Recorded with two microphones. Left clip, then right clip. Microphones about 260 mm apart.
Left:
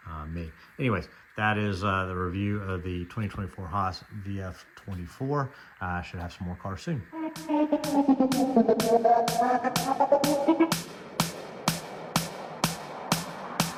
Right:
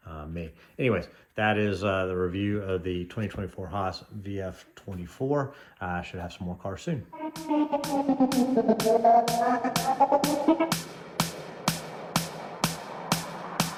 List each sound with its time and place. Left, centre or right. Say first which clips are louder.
0.1 s speech: right 1 dB; left
7.3 s music: even; centre